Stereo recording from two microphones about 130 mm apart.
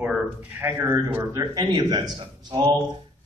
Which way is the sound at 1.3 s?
30° right (ahead or behind).